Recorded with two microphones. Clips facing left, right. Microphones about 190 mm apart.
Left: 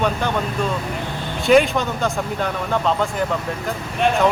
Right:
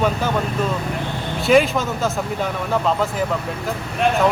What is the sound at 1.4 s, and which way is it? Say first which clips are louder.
Speech: left 1 dB; centre (ahead or behind).